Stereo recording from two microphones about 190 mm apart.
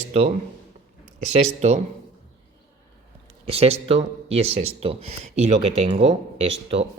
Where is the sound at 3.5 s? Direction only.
30° right (ahead or behind).